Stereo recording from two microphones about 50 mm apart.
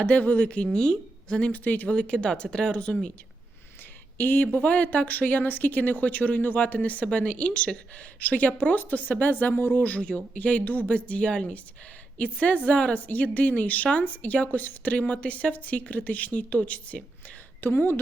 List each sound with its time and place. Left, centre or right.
0.0 s speech: left
1.5 s a woman's voice: left
2.0 s speech: centre
4.2 s a woman's voice: left
17.6 s speech: left